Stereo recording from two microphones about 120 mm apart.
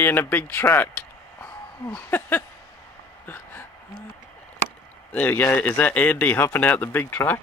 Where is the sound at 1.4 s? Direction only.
10° left (ahead or behind).